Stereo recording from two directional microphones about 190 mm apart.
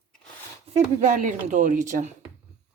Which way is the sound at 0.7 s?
40° right (ahead or behind).